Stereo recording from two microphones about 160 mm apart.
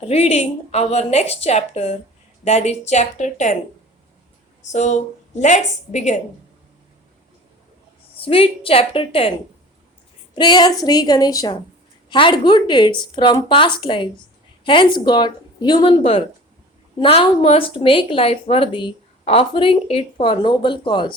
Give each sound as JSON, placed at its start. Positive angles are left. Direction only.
{"t": 0.0, "sound": "speech", "side_deg": 40}
{"t": 4.6, "sound": "speech", "side_deg": 45}
{"t": 8.1, "sound": "speech", "side_deg": 35}
{"t": 10.3, "sound": "a woman's voice", "side_deg": 30}